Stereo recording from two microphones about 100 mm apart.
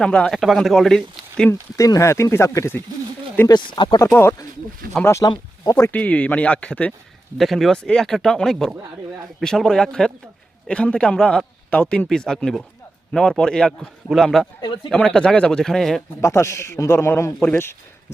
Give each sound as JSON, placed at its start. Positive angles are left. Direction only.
{"t": 0.0, "sound": "speech", "side_deg": 10}
{"t": 1.5, "sound": "a man's voice", "side_deg": 30}
{"t": 3.5, "sound": "speech", "side_deg": 55}
{"t": 4.1, "sound": "a man's voice", "side_deg": 20}
{"t": 5.9, "sound": "a man's voice", "side_deg": 15}
{"t": 7.3, "sound": "a man's voice", "side_deg": 0}
{"t": 16.2, "sound": "a man's voice", "side_deg": 30}